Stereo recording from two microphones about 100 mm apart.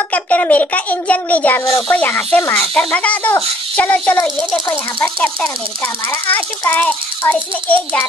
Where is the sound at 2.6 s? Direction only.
10° left (ahead or behind).